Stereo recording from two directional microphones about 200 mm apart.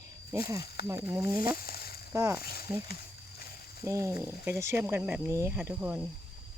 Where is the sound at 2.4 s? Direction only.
50° left (ahead or behind).